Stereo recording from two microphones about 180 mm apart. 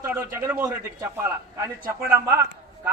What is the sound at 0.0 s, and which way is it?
A man's voice, 10° right (ahead or behind).